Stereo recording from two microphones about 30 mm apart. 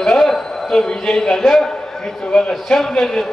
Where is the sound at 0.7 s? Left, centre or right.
Centre.